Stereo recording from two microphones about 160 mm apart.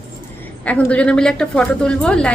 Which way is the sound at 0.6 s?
10° left (ahead or behind).